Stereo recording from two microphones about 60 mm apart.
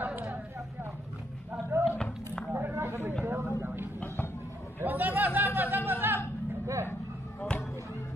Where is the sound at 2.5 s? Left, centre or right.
Right.